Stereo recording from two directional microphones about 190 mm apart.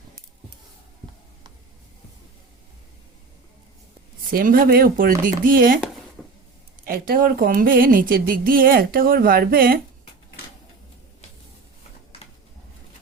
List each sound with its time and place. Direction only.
4.3 s speech: 50° right (ahead or behind)
6.2 s vehicle: 5° left (ahead or behind)
6.8 s speech: 50° right (ahead or behind)